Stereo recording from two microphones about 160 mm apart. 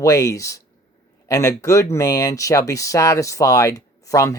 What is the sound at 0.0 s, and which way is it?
Speech, 20° left (ahead or behind).